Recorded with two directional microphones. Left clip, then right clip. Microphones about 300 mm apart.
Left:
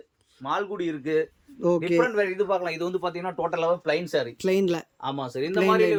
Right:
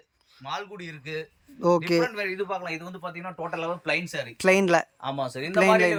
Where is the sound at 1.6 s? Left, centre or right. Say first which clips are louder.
Even; centre.